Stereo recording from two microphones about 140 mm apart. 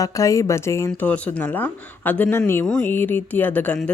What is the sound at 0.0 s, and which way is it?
Speech, 25° left (ahead or behind).